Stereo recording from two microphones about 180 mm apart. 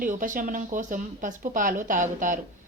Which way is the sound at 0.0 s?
45° right (ahead or behind).